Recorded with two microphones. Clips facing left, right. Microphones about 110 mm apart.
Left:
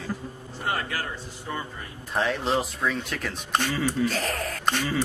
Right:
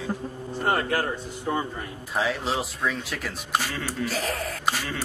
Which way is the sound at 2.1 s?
Centre (ahead or behind).